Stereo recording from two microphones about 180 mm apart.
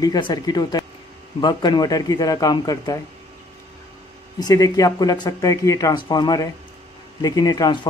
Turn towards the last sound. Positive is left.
turn(degrees=20)  # may be behind; listen again after turning